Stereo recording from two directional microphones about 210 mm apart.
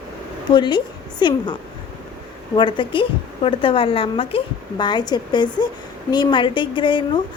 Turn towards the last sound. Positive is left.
turn(degrees=25)  # may be behind; listen again after turning